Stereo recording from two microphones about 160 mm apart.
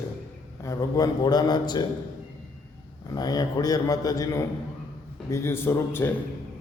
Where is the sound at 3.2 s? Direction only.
25° left (ahead or behind).